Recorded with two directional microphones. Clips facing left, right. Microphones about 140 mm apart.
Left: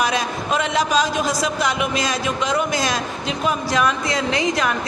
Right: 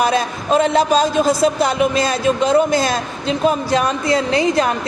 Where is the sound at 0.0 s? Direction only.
30° right (ahead or behind).